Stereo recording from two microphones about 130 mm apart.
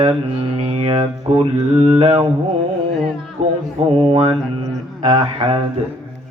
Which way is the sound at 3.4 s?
55° right (ahead or behind).